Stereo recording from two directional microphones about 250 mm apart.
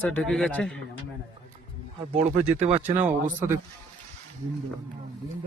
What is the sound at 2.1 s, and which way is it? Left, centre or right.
Speech, right.